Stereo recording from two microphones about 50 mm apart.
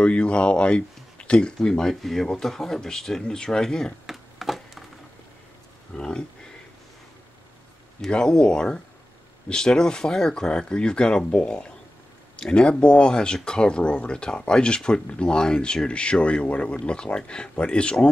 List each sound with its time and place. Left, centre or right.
0.0 s speech: left
4.0 s a sound: centre
5.9 s speech: centre
8.1 s speech: centre